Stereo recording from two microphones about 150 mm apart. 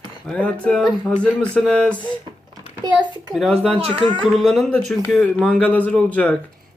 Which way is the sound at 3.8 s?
40° right (ahead or behind).